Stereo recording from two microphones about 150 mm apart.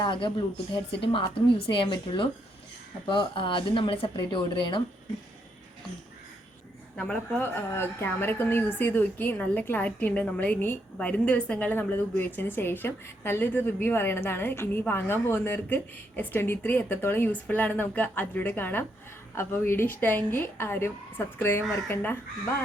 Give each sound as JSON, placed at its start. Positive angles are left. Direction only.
{"t": 0.0, "sound": "speech", "side_deg": 30}
{"t": 6.9, "sound": "a woman's voice", "side_deg": 5}